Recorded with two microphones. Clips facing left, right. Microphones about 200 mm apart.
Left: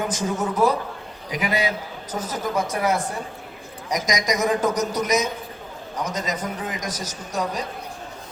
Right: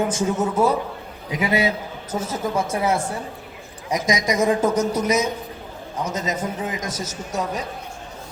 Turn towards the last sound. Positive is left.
turn(degrees=-25)  # may be behind; listen again after turning